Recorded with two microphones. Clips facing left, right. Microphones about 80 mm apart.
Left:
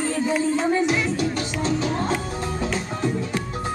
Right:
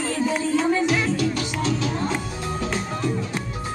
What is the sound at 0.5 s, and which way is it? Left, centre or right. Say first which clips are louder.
Music: even; left.